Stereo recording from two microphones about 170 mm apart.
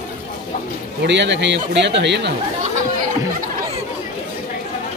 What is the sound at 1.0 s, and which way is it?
Speech, 90° right.